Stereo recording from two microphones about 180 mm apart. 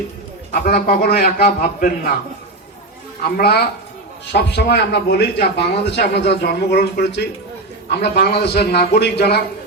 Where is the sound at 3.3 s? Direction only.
60° left (ahead or behind).